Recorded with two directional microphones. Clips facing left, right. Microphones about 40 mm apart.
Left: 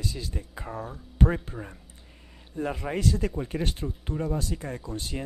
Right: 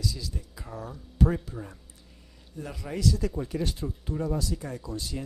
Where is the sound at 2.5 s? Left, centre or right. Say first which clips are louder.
Left 5 dB; left.